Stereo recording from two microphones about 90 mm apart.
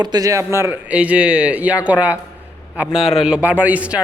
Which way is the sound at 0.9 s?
15° right (ahead or behind).